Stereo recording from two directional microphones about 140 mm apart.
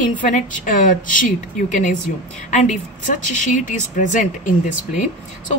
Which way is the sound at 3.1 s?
65° left (ahead or behind).